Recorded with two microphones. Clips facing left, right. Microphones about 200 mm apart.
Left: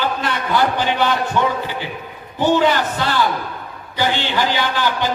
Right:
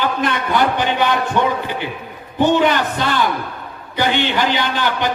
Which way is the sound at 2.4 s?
20° right (ahead or behind).